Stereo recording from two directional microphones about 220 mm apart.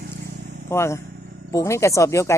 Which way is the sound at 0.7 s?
10° left (ahead or behind).